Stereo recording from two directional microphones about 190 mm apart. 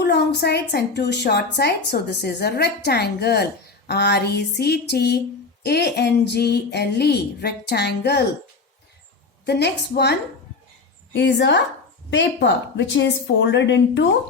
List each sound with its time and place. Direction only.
0.0 s a woman's voice: 60° left (ahead or behind)
9.5 s a woman's voice: 60° left (ahead or behind)